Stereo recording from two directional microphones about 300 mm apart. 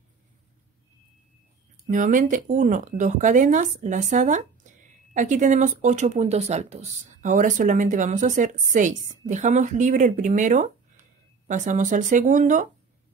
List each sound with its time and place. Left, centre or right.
1.9 s speech: right